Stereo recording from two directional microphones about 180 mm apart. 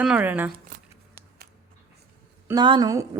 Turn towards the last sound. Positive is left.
turn(degrees=-20)  # may be behind; listen again after turning